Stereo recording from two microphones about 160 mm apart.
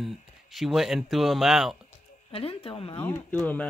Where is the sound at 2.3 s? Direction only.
35° left (ahead or behind).